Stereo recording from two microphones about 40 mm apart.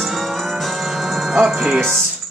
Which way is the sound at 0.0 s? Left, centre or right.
Centre.